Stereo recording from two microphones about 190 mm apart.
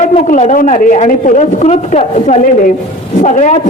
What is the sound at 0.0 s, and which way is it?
A man's voice, 40° left (ahead or behind).